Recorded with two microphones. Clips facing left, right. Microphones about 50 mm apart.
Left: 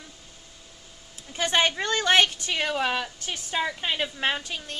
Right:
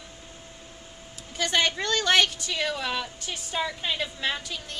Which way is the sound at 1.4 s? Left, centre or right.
Left.